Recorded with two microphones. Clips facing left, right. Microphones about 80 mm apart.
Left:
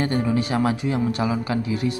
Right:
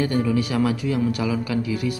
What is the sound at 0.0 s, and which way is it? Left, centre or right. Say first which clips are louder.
Speech: right 1 dB; left.